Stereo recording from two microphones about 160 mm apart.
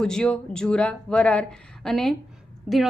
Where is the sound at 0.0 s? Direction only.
5° left (ahead or behind).